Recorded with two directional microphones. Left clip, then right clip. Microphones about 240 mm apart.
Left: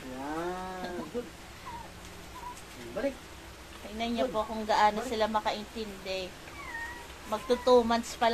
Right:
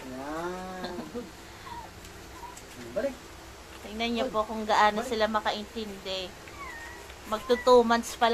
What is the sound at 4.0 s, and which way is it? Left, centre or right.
A woman's voice, centre.